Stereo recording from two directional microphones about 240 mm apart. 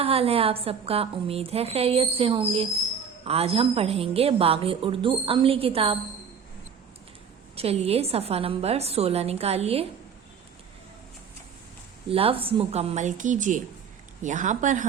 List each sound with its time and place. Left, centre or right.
0.0 s a woman's voice: right
7.5 s a woman's voice: right
12.0 s a woman's voice: right